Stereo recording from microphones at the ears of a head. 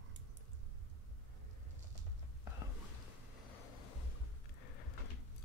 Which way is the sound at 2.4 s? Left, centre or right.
Left.